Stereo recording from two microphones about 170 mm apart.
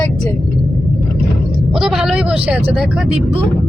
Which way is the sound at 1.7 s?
5° right (ahead or behind).